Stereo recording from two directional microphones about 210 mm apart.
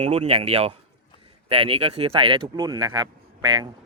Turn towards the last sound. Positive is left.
turn(degrees=-20)  # may be behind; listen again after turning